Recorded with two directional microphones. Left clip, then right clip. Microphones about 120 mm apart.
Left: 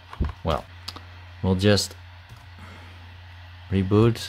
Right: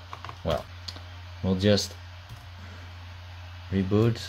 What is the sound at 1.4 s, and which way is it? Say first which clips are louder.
Speech: left 3 dB; 75° left (ahead or behind).